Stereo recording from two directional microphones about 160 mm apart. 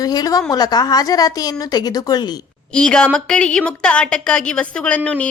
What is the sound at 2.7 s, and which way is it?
A woman's voice, 5° left (ahead or behind).